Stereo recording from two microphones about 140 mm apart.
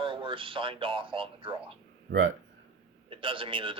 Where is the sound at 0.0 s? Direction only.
40° right (ahead or behind).